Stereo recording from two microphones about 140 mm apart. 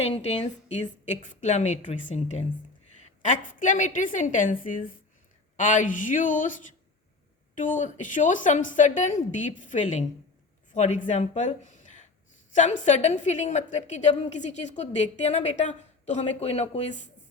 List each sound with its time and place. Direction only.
0.0 s a woman's voice: 50° left (ahead or behind); by 4.9 s 75° left (ahead or behind)
5.5 s a woman's voice: 65° left (ahead or behind)
7.5 s a woman's voice: 65° left (ahead or behind)